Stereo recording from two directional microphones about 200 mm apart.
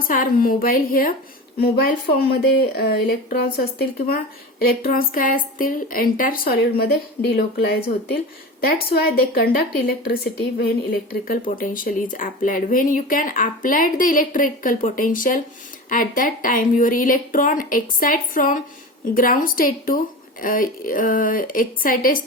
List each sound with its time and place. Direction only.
0.0 s speech: 45° left (ahead or behind)